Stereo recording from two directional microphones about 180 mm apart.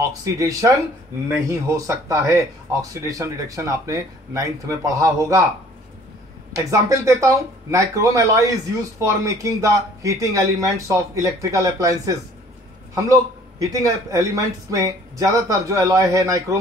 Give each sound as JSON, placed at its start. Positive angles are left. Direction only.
{"t": 0.0, "sound": "speech", "side_deg": -20}
{"t": 6.7, "sound": "speech", "side_deg": -15}